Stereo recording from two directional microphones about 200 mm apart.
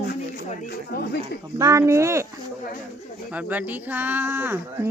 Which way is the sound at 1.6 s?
15° right (ahead or behind).